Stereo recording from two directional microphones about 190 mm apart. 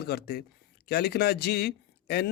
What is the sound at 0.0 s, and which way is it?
Speech, 60° left (ahead or behind).